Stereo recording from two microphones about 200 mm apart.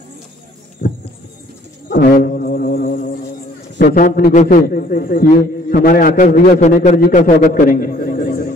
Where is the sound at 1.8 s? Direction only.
45° left (ahead or behind).